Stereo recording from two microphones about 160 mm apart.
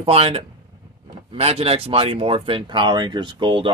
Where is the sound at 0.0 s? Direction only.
40° right (ahead or behind).